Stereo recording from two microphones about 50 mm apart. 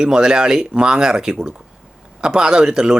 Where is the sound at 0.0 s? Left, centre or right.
Centre.